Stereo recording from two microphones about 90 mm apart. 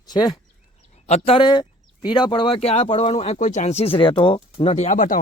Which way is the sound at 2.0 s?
55° left (ahead or behind).